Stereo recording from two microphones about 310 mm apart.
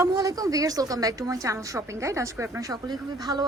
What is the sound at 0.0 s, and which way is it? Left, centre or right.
A woman's voice, centre.